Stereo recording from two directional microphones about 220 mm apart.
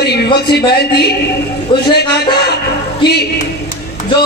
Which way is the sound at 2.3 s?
50° left (ahead or behind).